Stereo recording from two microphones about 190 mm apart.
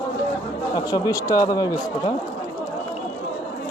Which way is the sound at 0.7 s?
20° left (ahead or behind).